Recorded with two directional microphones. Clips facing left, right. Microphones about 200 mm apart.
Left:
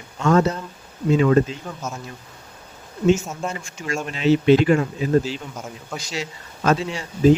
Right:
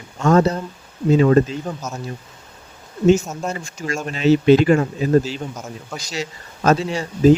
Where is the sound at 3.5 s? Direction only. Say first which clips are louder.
Right 2 dB; 40° right (ahead or behind).